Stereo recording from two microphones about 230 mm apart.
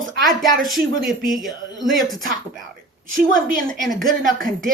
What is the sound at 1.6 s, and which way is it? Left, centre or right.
Speech, centre.